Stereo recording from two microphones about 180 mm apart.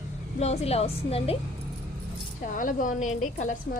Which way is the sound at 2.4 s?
50° left (ahead or behind).